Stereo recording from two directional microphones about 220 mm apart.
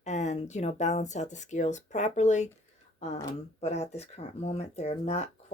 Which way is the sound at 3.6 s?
30° left (ahead or behind).